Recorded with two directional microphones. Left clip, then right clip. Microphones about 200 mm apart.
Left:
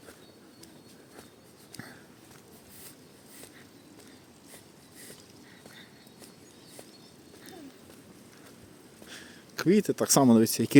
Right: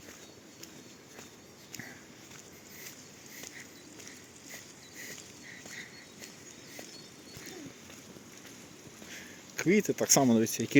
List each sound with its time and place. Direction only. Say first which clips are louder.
9.0 s speech: left 1 dB; 25° left (ahead or behind)